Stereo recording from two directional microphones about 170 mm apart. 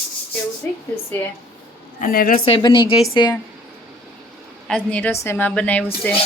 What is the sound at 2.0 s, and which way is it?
Speech, 55° left (ahead or behind).